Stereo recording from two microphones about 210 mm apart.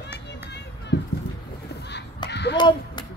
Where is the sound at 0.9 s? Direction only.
50° left (ahead or behind).